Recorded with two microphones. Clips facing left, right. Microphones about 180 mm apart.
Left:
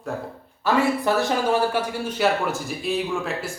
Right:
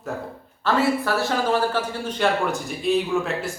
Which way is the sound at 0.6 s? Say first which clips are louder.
Even; 15° left (ahead or behind).